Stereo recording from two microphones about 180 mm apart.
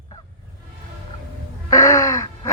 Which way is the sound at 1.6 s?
15° left (ahead or behind).